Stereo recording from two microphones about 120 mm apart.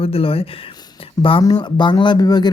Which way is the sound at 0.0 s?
50° left (ahead or behind).